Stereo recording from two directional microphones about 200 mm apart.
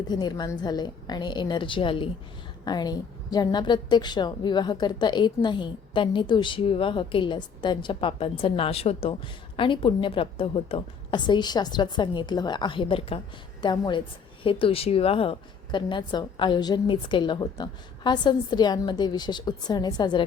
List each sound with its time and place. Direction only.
0.1 s a woman's voice: 20° left (ahead or behind)